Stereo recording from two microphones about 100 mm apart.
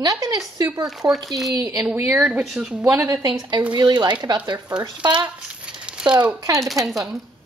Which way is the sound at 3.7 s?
45° right (ahead or behind).